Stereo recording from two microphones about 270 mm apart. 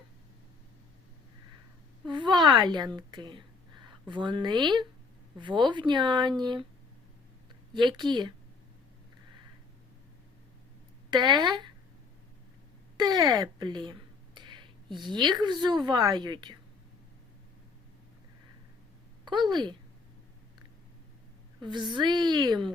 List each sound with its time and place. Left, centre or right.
2.0 s a sound: centre
2.6 s speech: centre
7.7 s speech: centre
11.1 s speech: centre
13.0 s speech: centre
19.2 s a woman's voice: centre
21.6 s speech: centre